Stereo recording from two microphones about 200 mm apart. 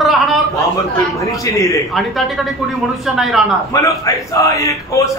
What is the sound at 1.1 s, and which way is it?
Speech, 15° left (ahead or behind).